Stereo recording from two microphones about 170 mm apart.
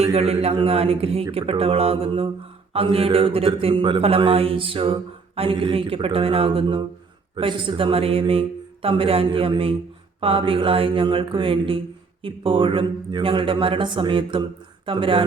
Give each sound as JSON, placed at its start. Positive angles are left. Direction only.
{"t": 0.0, "sound": "a man's voice", "side_deg": -35}